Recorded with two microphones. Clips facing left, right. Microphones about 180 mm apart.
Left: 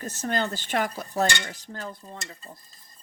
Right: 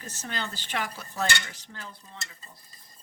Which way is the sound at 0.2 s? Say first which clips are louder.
Left 8 dB; 45° left (ahead or behind).